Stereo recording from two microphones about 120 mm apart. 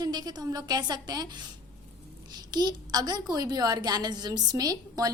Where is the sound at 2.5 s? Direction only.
35° right (ahead or behind).